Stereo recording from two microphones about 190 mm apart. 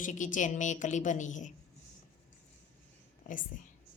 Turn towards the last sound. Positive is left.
turn(degrees=45)  # may be behind; listen again after turning